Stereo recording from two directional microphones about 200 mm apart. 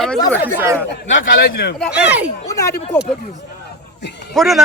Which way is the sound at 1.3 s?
50° left (ahead or behind).